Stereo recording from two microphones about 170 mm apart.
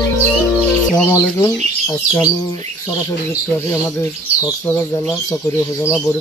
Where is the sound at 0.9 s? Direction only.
15° left (ahead or behind).